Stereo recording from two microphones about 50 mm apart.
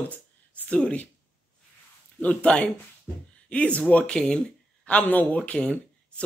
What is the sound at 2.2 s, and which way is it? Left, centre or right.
Speech, left.